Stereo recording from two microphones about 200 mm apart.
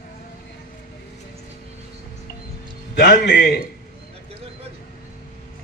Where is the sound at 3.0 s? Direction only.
50° left (ahead or behind).